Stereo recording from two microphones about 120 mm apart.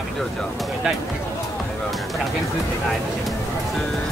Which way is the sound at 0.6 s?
Centre (ahead or behind).